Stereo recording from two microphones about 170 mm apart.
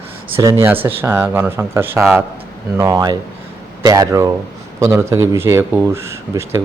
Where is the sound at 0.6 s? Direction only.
10° right (ahead or behind).